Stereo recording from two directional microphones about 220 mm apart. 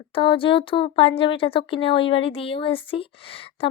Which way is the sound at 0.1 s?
25° left (ahead or behind).